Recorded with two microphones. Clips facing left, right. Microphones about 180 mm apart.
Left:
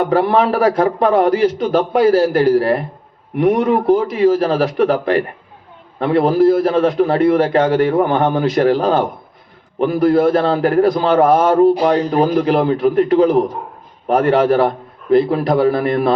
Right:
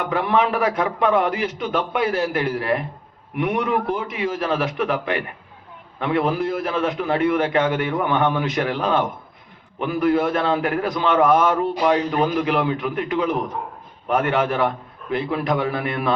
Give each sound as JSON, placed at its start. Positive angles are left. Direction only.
{"t": 0.0, "sound": "a man's voice", "side_deg": 35}